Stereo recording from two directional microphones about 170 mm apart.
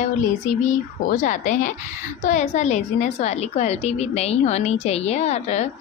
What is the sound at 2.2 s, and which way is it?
A woman's voice, 45° left (ahead or behind).